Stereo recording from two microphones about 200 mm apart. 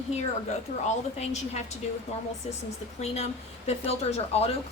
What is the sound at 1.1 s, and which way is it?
Speech, 35° left (ahead or behind).